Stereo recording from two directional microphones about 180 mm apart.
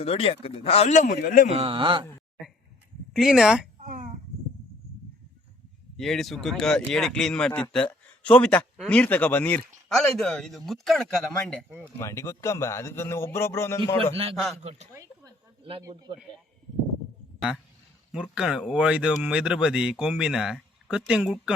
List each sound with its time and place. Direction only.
0.0 s speech: 30° left (ahead or behind); by 1.5 s 50° left (ahead or behind)
1.5 s speech: 35° right (ahead or behind)
3.1 s speech: centre (ahead or behind)
3.8 s a sound: 45° right (ahead or behind)
6.0 s speech: centre (ahead or behind)
11.9 s a man's voice: 15° left (ahead or behind)
14.3 s speech: centre (ahead or behind)
14.6 s speech: 35° right (ahead or behind)
14.9 s a sound: 20° right (ahead or behind)
15.8 s speech: 20° right (ahead or behind)
18.1 s speech: 5° right (ahead or behind)